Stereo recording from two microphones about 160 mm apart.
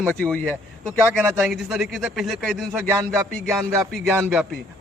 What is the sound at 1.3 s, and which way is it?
Speech, 15° right (ahead or behind).